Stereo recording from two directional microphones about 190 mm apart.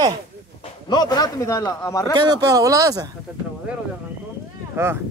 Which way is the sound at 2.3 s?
20° right (ahead or behind).